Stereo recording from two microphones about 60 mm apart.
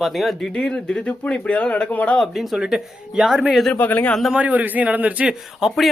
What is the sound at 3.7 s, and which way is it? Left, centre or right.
Speech, left.